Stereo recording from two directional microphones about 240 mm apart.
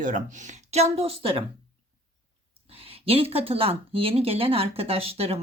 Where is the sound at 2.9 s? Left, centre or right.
Right.